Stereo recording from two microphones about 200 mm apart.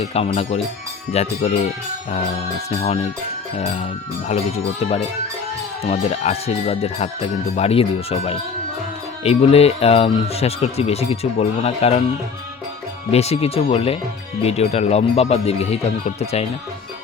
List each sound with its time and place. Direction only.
0.0 s speech: 30° left (ahead or behind)
2.6 s speech: 30° left (ahead or behind)
4.3 s speech: 30° left (ahead or behind)
13.1 s speech: 30° left (ahead or behind)